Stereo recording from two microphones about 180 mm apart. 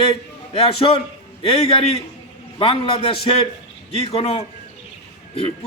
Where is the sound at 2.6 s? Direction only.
30° left (ahead or behind).